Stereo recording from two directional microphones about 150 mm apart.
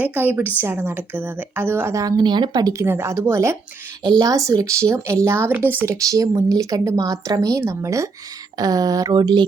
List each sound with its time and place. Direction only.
0.0 s speech: 15° right (ahead or behind)
2.8 s speech: 15° right (ahead or behind)